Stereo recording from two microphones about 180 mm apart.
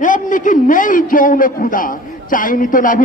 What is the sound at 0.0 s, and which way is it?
A man's voice, 45° left (ahead or behind).